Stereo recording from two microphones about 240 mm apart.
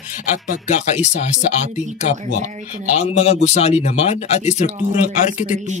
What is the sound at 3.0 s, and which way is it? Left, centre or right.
Speech, left.